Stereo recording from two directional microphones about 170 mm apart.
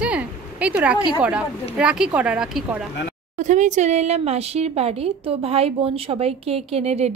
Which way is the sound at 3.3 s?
45° right (ahead or behind).